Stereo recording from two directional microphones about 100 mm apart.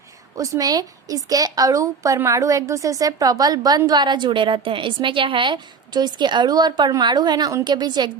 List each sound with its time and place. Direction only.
0.3 s a woman's voice: 35° right (ahead or behind)